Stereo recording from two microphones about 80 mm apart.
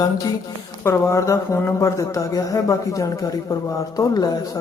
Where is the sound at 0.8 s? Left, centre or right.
Left.